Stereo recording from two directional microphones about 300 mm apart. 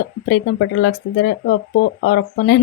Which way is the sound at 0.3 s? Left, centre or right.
Left.